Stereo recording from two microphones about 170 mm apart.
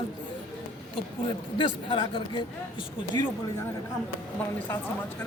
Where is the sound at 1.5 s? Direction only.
25° left (ahead or behind).